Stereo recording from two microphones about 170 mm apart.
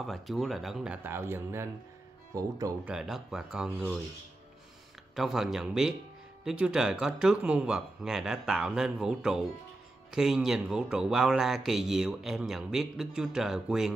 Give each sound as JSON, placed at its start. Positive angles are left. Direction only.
{"t": 0.0, "sound": "speech", "side_deg": 0}
{"t": 1.0, "sound": "speech", "side_deg": -15}
{"t": 2.9, "sound": "speech", "side_deg": 0}
{"t": 5.1, "sound": "speech", "side_deg": 0}